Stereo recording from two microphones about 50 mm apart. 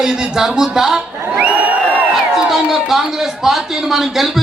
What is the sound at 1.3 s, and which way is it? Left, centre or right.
Crowd, right.